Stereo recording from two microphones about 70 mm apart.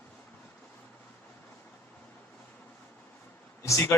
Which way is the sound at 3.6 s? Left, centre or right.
Left.